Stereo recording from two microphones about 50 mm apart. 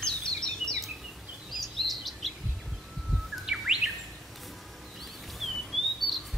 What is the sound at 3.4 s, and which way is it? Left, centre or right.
Chirp, centre.